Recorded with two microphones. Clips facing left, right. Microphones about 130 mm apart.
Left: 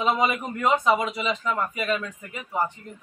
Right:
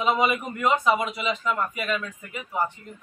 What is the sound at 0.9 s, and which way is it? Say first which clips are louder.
A man's voice: left 1 dB; 35° left (ahead or behind).